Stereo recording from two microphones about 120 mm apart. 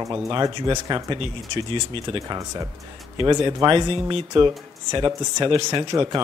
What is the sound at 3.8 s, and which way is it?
Speech, 45° right (ahead or behind).